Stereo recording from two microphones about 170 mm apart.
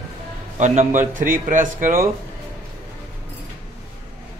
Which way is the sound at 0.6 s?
45° right (ahead or behind).